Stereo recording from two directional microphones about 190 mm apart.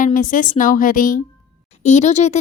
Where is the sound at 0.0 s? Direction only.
45° left (ahead or behind).